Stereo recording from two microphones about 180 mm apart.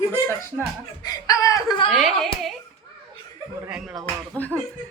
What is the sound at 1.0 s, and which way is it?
Speech, 20° left (ahead or behind).